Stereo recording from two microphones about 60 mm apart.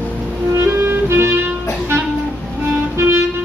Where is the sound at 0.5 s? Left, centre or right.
Right.